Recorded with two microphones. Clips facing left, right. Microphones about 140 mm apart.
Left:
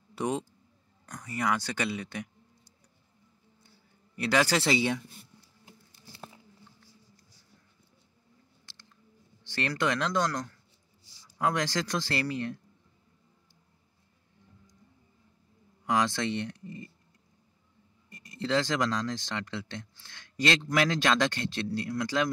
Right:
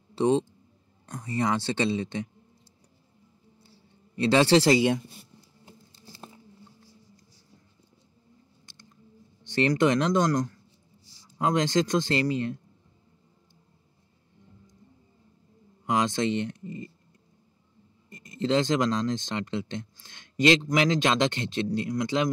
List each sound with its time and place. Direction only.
0.1 s speech: 30° right (ahead or behind)
3.6 s a sound: 30° right (ahead or behind)
8.6 s a sound: 15° right (ahead or behind)
9.4 s speech: 20° right (ahead or behind)
15.8 s speech: 20° right (ahead or behind)
18.1 s speech: 20° right (ahead or behind)